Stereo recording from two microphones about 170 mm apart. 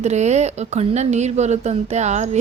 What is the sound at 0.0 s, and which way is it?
A woman's voice, 40° right (ahead or behind).